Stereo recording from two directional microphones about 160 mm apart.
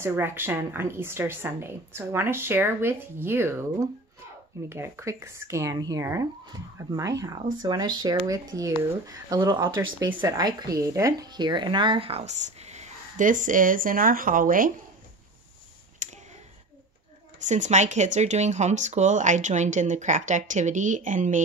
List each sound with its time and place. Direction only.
0.0 s a woman's voice: 15° right (ahead or behind)
4.6 s a woman's voice: 15° right (ahead or behind); by 14.7 s 60° right (ahead or behind)
16.0 s a sound: 50° right (ahead or behind)
17.4 s speech: 50° right (ahead or behind)